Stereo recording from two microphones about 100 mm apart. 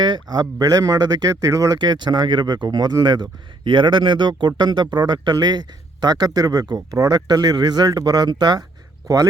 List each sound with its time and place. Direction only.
0.0 s speech: 50° right (ahead or behind)